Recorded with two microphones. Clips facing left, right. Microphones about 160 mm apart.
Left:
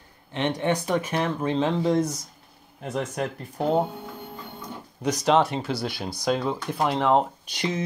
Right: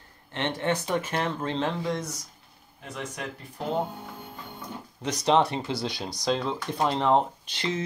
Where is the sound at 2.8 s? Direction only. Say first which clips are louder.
Left 8 dB; 45° left (ahead or behind).